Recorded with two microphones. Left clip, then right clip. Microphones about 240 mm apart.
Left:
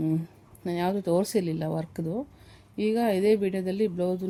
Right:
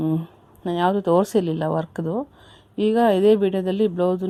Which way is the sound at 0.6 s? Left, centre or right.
Centre.